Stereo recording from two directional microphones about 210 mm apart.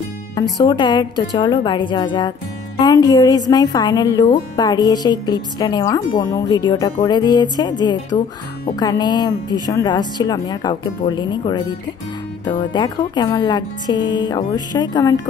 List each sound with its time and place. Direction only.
0.4 s speech: 20° left (ahead or behind)